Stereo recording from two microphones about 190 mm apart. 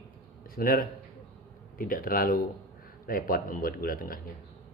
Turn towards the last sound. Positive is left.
turn(degrees=50)  # may be behind; listen again after turning